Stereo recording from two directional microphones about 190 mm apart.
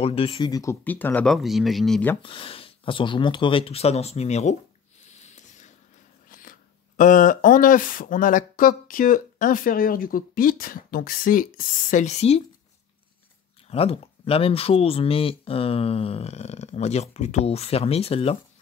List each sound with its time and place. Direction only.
0.0 s speech: 30° left (ahead or behind); by 2.1 s 5° left (ahead or behind)
2.2 s speech: 30° left (ahead or behind)
5.2 s a sound: 40° left (ahead or behind)
7.0 s speech: 45° left (ahead or behind)
13.7 s speech: 30° left (ahead or behind)